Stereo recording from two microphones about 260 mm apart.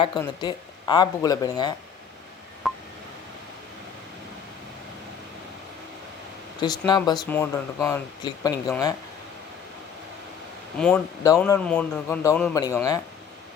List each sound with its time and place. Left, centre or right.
0.0 s speech: centre
2.6 s telephone dialing: centre
6.6 s speech: centre
10.8 s speech: centre